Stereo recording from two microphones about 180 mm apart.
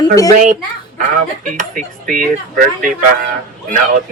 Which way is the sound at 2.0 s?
50° right (ahead or behind).